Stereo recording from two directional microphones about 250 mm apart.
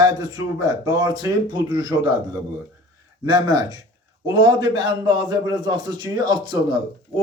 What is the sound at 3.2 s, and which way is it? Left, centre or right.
A man's voice, centre.